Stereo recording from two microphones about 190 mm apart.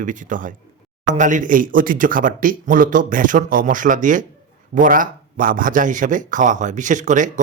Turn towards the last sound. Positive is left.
turn(degrees=-40)  # may be behind; listen again after turning